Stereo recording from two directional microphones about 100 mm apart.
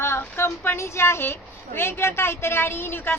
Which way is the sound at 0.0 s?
25° left (ahead or behind).